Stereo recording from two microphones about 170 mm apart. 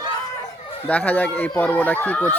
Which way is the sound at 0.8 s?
10° left (ahead or behind).